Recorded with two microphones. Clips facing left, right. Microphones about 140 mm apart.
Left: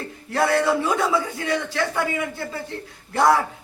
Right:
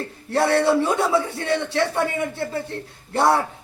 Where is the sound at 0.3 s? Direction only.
30° right (ahead or behind).